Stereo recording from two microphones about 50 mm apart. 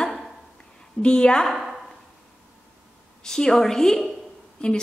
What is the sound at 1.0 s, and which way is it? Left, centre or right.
Speech, centre.